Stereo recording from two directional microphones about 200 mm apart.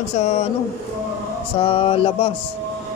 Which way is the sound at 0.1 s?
35° left (ahead or behind).